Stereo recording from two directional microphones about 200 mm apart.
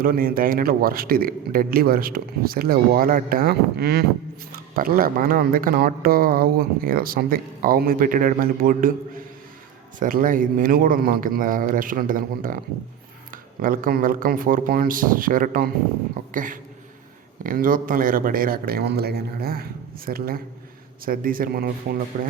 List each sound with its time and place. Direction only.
0.0 s speech: 45° right (ahead or behind)
10.0 s speech: 45° right (ahead or behind)